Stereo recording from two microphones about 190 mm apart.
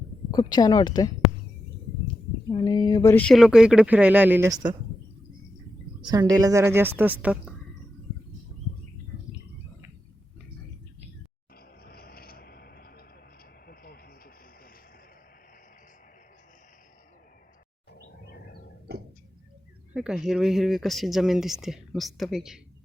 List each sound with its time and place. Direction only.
0.3 s speech: 20° left (ahead or behind)
2.5 s speech: 25° left (ahead or behind); by 4.6 s 15° right (ahead or behind)
6.1 s a woman's voice: 20° right (ahead or behind)
11.8 s vehicle: 55° left (ahead or behind)
18.9 s tick-tock: 55° right (ahead or behind)
19.9 s speech: 5° right (ahead or behind)